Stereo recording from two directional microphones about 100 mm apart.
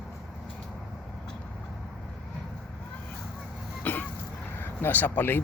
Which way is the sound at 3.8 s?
15° left (ahead or behind).